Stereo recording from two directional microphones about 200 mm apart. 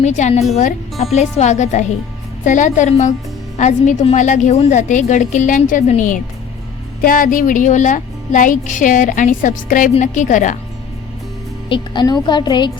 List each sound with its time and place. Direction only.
0.0 s speech: 35° left (ahead or behind)
11.7 s a woman's voice: 20° left (ahead or behind)